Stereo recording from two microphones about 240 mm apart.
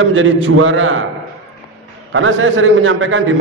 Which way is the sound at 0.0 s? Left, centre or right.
Right.